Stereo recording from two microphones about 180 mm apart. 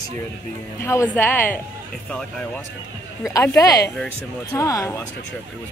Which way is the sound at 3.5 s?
20° left (ahead or behind).